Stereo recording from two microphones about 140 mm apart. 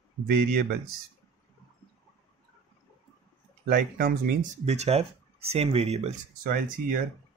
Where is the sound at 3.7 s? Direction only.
80° right.